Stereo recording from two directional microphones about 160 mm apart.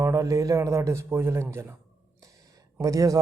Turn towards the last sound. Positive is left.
turn(degrees=-20)  # may be behind; listen again after turning